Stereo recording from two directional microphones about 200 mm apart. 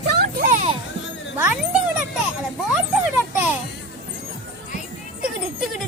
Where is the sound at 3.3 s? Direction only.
10° right (ahead or behind).